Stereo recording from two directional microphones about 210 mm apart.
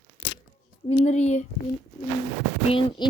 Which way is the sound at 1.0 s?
35° left (ahead or behind).